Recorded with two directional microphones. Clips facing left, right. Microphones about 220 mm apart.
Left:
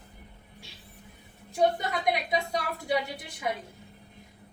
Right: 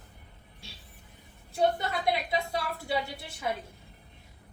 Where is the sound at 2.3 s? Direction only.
15° left (ahead or behind).